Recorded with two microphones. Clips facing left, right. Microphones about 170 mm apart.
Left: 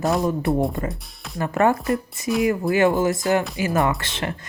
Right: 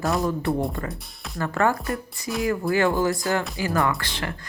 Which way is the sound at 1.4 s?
20° left (ahead or behind).